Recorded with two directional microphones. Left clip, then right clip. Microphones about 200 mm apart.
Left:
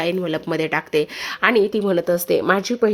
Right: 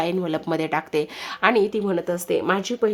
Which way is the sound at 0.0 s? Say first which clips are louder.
Left 2 dB; 5° left (ahead or behind).